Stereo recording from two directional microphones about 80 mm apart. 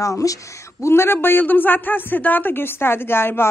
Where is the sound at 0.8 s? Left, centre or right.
Left.